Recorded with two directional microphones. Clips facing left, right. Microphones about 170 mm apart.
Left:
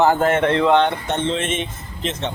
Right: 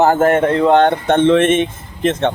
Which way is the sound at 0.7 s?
50° right (ahead or behind).